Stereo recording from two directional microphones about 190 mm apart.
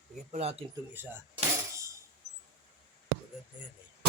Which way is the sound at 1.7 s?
15° right (ahead or behind).